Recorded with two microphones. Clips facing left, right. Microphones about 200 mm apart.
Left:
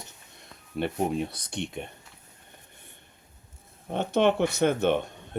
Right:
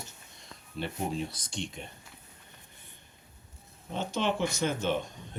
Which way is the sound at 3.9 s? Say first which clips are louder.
Left 7 dB; 60° left (ahead or behind).